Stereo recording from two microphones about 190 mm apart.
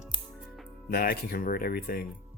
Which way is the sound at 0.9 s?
50° left (ahead or behind).